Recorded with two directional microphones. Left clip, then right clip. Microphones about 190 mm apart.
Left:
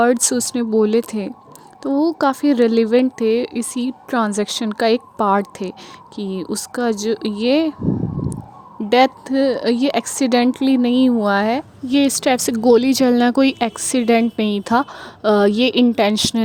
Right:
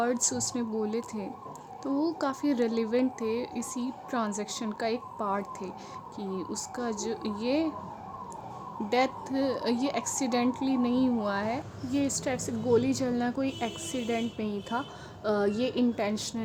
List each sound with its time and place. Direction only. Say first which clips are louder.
0.0 s speech: left 13 dB; 50° left (ahead or behind)
8.9 s speech: left 13 dB; 45° left (ahead or behind)